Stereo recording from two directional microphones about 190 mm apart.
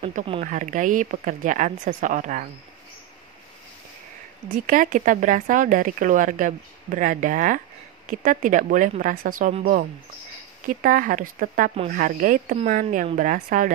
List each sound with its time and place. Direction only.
0.0 s speech: 30° right (ahead or behind)
4.6 s a woman's voice: 45° right (ahead or behind)